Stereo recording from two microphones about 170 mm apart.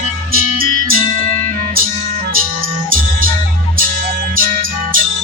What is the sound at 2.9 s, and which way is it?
Music, 55° right (ahead or behind).